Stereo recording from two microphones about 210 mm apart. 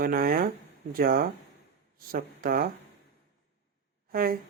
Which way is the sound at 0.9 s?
45° right (ahead or behind).